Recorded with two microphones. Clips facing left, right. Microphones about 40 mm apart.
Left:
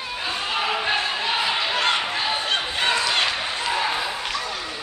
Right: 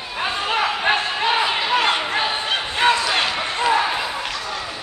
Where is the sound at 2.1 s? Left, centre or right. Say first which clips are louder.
Right 3 dB; right.